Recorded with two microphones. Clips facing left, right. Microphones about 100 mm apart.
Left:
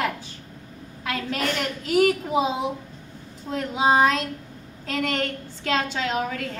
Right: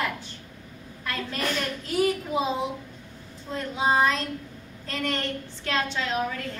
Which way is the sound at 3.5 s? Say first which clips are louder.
Left 4 dB; 85° left.